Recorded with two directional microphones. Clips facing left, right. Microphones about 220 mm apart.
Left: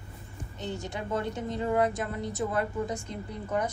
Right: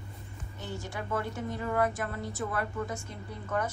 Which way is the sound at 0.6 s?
20° left (ahead or behind).